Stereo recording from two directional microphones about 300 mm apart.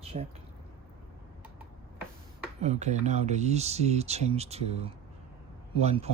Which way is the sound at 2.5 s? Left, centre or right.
Right.